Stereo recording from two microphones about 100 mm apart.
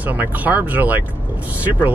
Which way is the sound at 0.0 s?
15° right (ahead or behind).